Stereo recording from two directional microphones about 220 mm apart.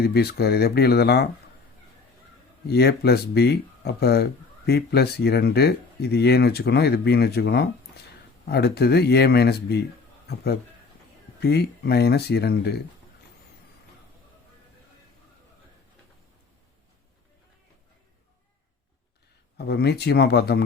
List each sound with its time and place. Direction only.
0.0 s speech: 45° left (ahead or behind)
2.6 s speech: 45° left (ahead or behind)
19.5 s speech: 50° left (ahead or behind)